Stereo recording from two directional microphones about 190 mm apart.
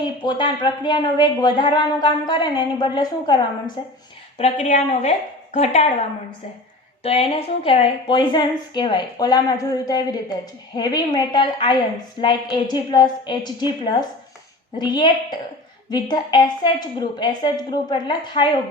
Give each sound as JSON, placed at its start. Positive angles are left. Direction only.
{"t": 0.2, "sound": "a woman's voice", "side_deg": 25}
{"t": 4.4, "sound": "a woman's voice", "side_deg": 35}
{"t": 7.0, "sound": "a woman's voice", "side_deg": 30}